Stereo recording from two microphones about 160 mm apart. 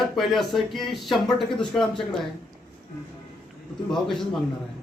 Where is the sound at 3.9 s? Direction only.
Centre (ahead or behind).